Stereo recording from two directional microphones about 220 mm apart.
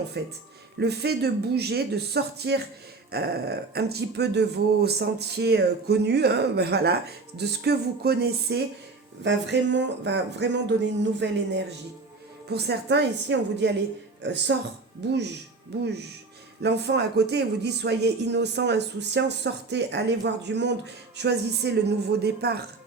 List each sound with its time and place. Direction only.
0.2 s speech: 50° right (ahead or behind)
16.6 s speech: 50° right (ahead or behind)